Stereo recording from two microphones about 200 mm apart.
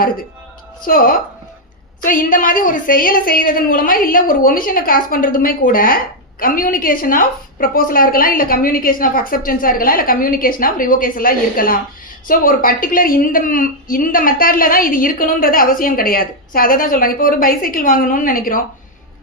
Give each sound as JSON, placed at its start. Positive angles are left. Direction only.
{"t": 0.9, "sound": "a woman's voice", "side_deg": 45}